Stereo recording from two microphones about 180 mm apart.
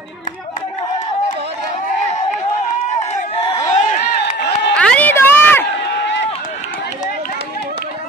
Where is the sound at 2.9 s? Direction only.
40° left (ahead or behind).